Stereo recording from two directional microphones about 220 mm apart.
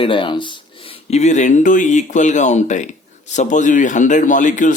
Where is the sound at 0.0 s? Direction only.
25° left (ahead or behind).